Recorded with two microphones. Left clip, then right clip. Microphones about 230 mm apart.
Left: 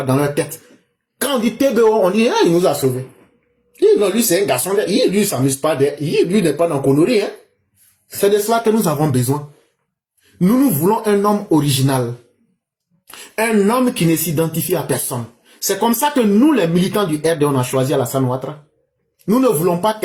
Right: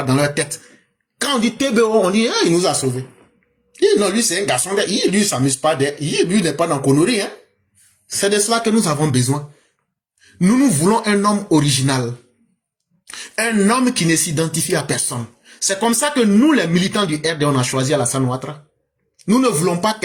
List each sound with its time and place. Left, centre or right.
0.1 s speech: right
3.8 s speech: right
11.0 s speech: right
13.1 s speech: right